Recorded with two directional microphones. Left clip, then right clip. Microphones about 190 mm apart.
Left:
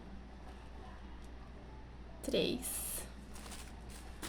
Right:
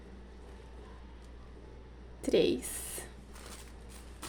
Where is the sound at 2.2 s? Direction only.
45° right (ahead or behind).